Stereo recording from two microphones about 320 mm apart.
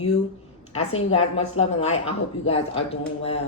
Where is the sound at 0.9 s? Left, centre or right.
Centre.